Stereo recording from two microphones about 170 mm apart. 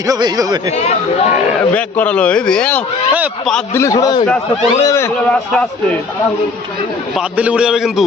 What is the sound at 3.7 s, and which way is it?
A man's voice, 15° left (ahead or behind).